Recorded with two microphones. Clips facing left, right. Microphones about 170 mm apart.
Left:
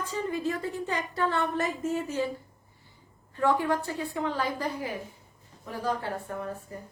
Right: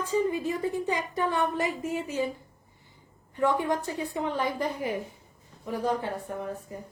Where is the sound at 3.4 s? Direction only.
20° right (ahead or behind).